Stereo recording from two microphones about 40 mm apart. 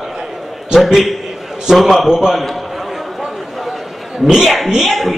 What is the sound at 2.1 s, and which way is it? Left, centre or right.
Speech, centre.